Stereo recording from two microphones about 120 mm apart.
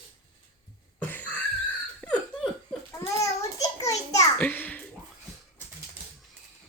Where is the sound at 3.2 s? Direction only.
25° left (ahead or behind).